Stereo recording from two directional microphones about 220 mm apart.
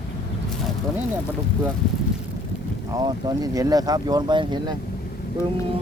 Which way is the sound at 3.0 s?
15° right (ahead or behind).